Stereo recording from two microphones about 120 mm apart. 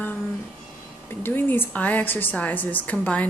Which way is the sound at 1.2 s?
15° left (ahead or behind).